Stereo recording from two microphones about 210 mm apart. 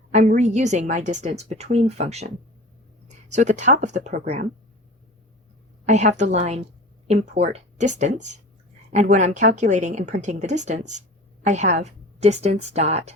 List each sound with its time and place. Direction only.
0.1 s a woman's voice: 35° right (ahead or behind)
3.2 s a woman's voice: 35° right (ahead or behind)
5.8 s a woman's voice: 35° right (ahead or behind)